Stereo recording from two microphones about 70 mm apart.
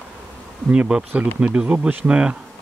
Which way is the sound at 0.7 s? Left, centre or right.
Centre.